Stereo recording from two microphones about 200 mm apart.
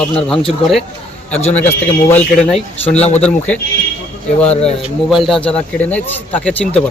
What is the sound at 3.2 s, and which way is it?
Speech, 5° left (ahead or behind).